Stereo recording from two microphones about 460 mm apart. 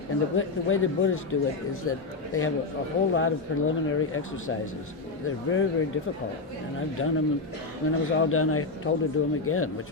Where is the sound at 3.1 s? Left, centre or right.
Left.